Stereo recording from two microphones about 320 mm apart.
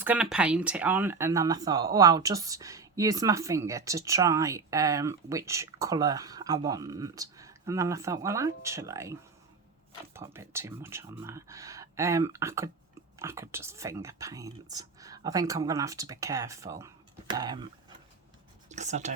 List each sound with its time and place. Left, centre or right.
0.0 s speech: centre
10.2 s speech: centre